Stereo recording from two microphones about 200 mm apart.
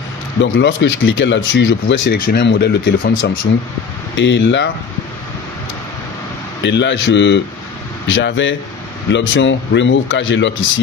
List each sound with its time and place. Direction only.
0.4 s speech: 70° left (ahead or behind)
6.6 s speech: 60° left (ahead or behind)